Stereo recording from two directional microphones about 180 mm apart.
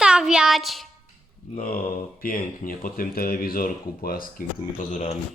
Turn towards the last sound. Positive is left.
turn(degrees=45)  # may be behind; listen again after turning